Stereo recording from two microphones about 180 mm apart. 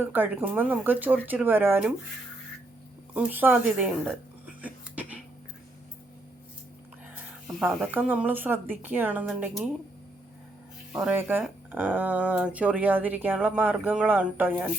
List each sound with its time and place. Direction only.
0.0 s speech: 10° right (ahead or behind)
3.2 s speech: 10° right (ahead or behind)
4.6 s a sound: 10° right (ahead or behind)
7.4 s speech: 5° right (ahead or behind)
10.9 s speech: 10° right (ahead or behind)